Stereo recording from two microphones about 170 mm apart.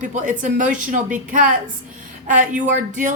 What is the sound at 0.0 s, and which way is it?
A woman's voice, 50° right (ahead or behind).